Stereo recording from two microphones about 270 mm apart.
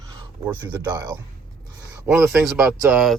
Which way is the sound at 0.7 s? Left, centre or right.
Centre.